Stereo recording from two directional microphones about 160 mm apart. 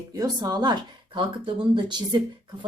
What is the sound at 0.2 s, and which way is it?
A woman's voice, 25° right (ahead or behind).